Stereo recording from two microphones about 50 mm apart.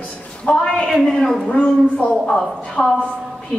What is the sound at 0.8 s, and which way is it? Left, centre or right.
A woman's voice, centre.